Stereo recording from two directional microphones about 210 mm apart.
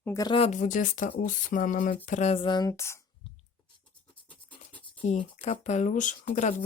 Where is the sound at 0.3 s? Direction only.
30° left (ahead or behind); by 3.0 s 15° left (ahead or behind).